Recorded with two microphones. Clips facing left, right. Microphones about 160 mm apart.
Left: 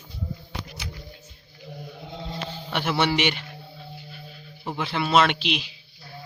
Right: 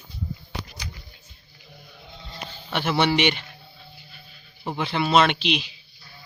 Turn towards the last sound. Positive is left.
turn(degrees=5)  # may be behind; listen again after turning